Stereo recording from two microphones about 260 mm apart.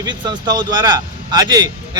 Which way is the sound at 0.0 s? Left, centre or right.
Centre.